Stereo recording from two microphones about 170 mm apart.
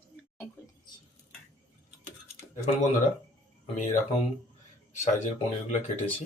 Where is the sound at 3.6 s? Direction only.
40° left (ahead or behind).